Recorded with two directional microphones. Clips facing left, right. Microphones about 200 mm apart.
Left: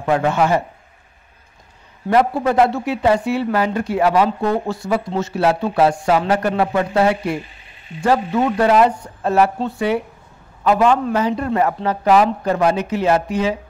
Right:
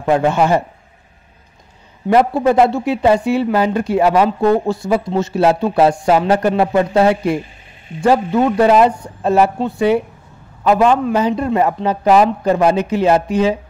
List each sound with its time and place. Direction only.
0.0 s speech: 25° right (ahead or behind)
2.0 s speech: 20° right (ahead or behind)